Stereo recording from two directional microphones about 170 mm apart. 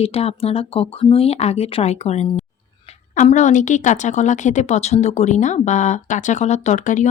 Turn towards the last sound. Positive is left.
turn(degrees=45)  # may be behind; listen again after turning